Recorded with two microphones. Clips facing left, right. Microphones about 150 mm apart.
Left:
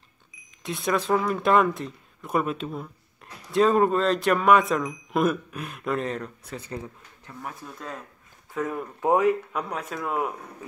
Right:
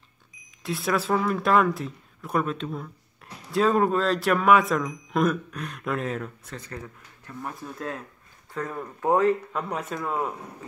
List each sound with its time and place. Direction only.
0.7 s speech: centre (ahead or behind)
6.6 s speech: 20° left (ahead or behind)
7.6 s speech: centre (ahead or behind)
9.0 s speech: 15° left (ahead or behind)
9.6 s speech: centre (ahead or behind)